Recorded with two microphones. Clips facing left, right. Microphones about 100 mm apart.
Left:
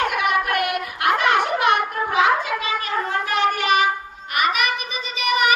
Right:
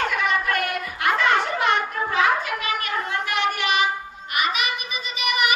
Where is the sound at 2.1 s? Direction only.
20° left (ahead or behind); by 4.7 s 50° left (ahead or behind).